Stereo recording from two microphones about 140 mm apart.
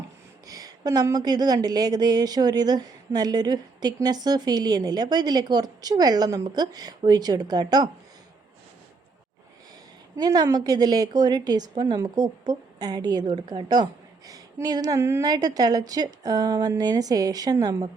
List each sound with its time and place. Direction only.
0.4 s a woman's voice: 25° right (ahead or behind)
10.2 s a woman's voice: 30° right (ahead or behind)